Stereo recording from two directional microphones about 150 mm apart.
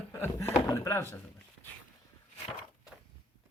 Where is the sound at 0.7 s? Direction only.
20° left (ahead or behind).